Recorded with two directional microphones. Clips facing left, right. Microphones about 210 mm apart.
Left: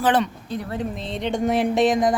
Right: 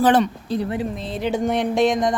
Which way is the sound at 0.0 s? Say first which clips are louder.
Right 4 dB; 40° right (ahead or behind).